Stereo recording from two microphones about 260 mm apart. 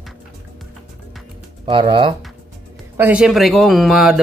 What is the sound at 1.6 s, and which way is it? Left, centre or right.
Speech, centre.